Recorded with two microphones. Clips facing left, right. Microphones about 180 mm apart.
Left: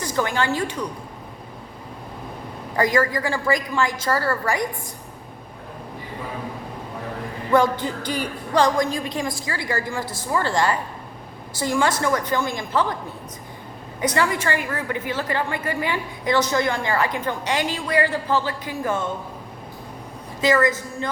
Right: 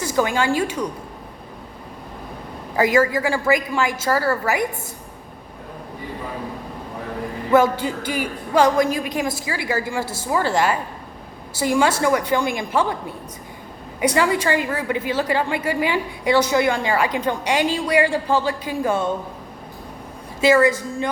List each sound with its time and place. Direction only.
0.0 s a woman's voice: 10° right (ahead or behind)
2.7 s a woman's voice: 10° right (ahead or behind)
7.5 s a woman's voice: 10° right (ahead or behind)
14.0 s a woman's voice: 10° right (ahead or behind)
20.4 s a woman's voice: 10° right (ahead or behind)